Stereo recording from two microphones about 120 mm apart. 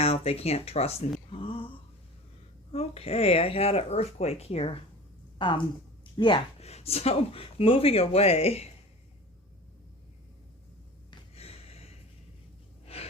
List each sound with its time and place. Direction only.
0.0 s speech: 55° left (ahead or behind)
1.3 s a sound: 50° left (ahead or behind)
2.7 s speech: 55° left (ahead or behind)
5.4 s speech: 40° left (ahead or behind)
6.6 s speech: 60° left (ahead or behind)
11.3 s a sound: 55° left (ahead or behind)
12.8 s gasp: 60° left (ahead or behind)